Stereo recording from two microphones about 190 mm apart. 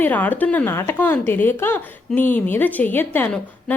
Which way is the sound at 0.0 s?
10° left (ahead or behind).